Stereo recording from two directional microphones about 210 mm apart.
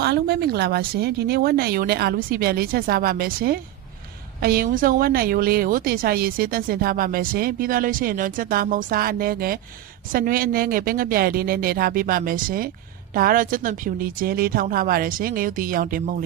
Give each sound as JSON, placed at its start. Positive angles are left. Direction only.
{"t": 0.0, "sound": "speech", "side_deg": -50}